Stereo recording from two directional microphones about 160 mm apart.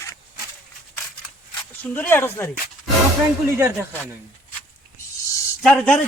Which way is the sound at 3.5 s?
15° right (ahead or behind).